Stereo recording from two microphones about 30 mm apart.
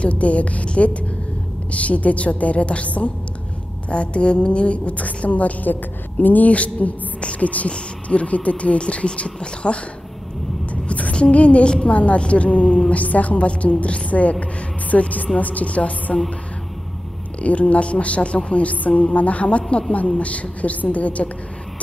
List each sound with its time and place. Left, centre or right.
0.0 s a woman's voice: left
6.5 s a woman's voice: left
7.7 s speech: left
10.7 s a sound: left
11.3 s a woman's voice: left
11.6 s a woman's voice: left
11.9 s speech: left
12.9 s a woman's voice: left
17.4 s a woman's voice: left
19.4 s speech: left
20.2 s a woman's voice: left